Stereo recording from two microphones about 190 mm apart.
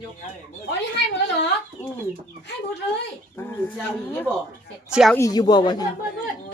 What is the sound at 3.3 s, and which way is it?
Speech, 10° left (ahead or behind).